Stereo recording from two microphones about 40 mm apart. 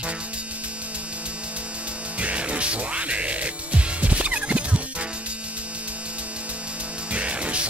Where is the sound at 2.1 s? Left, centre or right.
Right.